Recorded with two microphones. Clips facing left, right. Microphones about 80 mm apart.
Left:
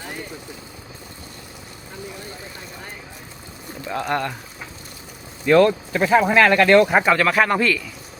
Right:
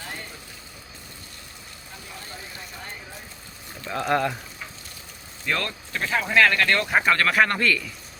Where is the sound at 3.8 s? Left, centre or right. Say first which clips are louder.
Even; centre.